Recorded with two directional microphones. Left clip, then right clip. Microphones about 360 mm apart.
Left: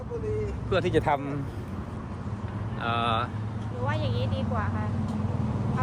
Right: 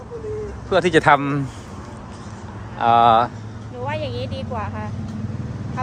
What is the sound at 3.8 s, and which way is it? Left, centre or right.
Speech, right.